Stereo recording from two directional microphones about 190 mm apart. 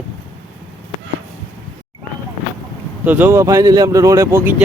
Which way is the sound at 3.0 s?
10° right (ahead or behind).